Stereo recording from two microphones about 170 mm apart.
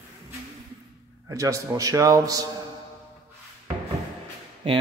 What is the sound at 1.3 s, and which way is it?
A man's voice, 20° right (ahead or behind).